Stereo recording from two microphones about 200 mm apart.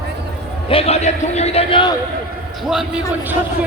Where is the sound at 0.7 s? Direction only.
30° left (ahead or behind).